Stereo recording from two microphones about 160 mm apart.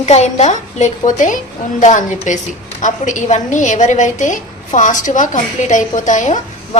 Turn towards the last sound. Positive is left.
turn(degrees=50)  # may be behind; listen again after turning